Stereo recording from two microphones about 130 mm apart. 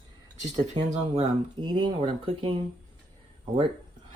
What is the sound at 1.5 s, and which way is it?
Speech, 35° right (ahead or behind).